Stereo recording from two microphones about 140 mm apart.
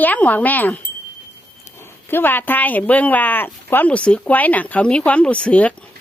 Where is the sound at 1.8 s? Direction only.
15° left (ahead or behind).